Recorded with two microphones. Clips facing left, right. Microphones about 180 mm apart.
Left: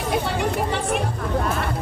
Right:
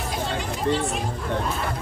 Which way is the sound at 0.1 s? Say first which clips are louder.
Left 7 dB; 65° left (ahead or behind).